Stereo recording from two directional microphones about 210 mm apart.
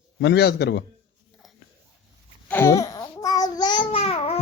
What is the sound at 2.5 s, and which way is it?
Babbling, 15° left (ahead or behind).